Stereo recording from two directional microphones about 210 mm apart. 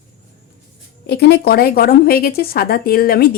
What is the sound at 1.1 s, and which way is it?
Speech, 50° left (ahead or behind).